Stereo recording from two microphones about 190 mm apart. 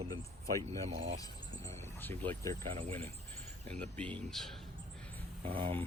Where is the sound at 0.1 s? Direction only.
15° left (ahead or behind).